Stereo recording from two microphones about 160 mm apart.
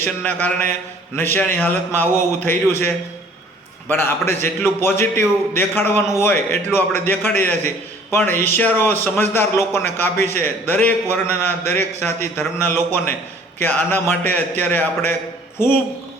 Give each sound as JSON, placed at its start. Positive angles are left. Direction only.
{"t": 0.0, "sound": "a man's voice", "side_deg": 10}